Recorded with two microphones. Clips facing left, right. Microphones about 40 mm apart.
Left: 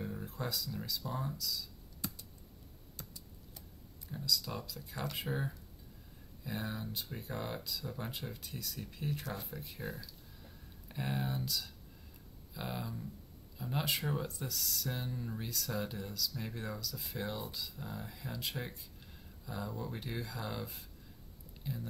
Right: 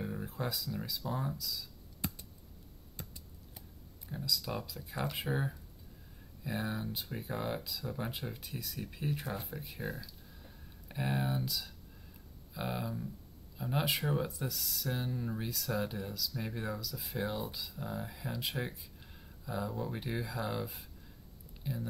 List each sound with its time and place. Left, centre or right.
0.0 s speech: centre
4.1 s speech: centre